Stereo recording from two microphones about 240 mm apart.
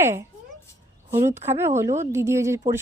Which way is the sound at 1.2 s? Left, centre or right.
Centre.